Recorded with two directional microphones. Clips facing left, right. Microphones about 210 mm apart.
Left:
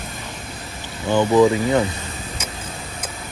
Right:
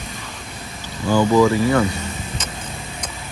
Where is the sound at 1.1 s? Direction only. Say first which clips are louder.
Even; 20° left (ahead or behind).